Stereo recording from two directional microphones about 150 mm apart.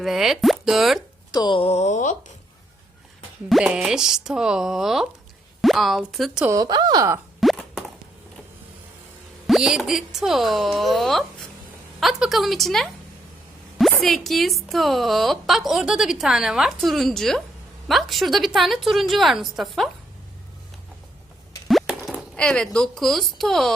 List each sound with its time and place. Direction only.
0.0 s a woman's voice: centre (ahead or behind)
1.3 s speech: 30° left (ahead or behind); by 2.3 s 55° left (ahead or behind)
3.5 s a woman's voice: 5° right (ahead or behind)
6.4 s a woman's voice: 20° right (ahead or behind)
7.4 s a sound: 5° left (ahead or behind)
9.5 s a woman's voice: 5° right (ahead or behind)
14.0 s a woman's voice: centre (ahead or behind)
21.7 s speech: centre (ahead or behind)